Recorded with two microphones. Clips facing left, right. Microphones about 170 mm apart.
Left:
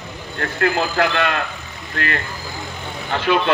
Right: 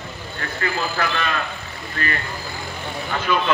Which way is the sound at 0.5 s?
65° left (ahead or behind).